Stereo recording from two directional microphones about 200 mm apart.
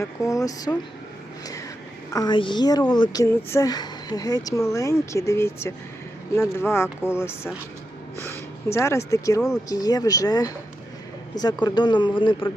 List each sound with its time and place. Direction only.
0.0 s speech: 15° left (ahead or behind)
2.0 s speech: 20° left (ahead or behind)